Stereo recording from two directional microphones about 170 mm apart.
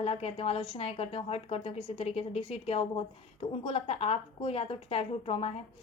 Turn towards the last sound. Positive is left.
turn(degrees=35)  # may be behind; listen again after turning